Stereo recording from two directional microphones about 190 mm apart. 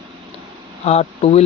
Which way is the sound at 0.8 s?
35° left (ahead or behind).